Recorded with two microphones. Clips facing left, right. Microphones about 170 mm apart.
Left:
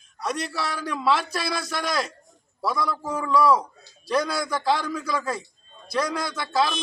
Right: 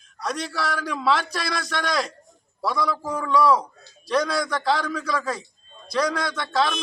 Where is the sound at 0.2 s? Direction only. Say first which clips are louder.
Right 1 dB; centre (ahead or behind).